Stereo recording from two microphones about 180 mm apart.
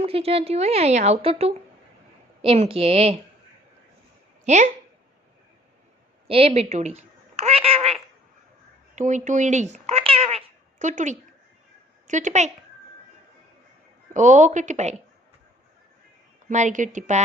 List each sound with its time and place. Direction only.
0.0 s a woman's voice: 35° right (ahead or behind)
4.4 s speech: 40° right (ahead or behind)
6.2 s speech: 30° right (ahead or behind)
14.1 s speech: 40° right (ahead or behind)
16.5 s a woman's voice: 40° right (ahead or behind)